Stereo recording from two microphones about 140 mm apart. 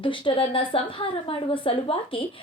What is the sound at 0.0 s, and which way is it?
A woman's voice, 35° left (ahead or behind).